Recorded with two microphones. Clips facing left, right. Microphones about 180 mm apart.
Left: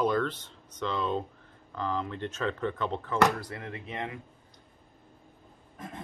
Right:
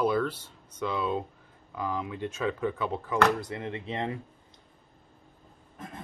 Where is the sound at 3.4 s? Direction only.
25° right (ahead or behind).